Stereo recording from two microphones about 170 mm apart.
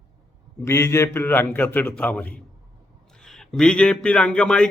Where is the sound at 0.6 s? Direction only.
15° left (ahead or behind).